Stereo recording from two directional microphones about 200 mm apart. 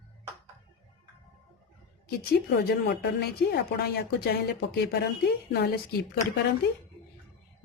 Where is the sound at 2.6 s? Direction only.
55° left (ahead or behind).